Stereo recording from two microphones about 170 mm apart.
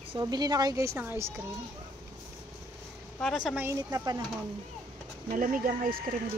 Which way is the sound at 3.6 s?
15° right (ahead or behind).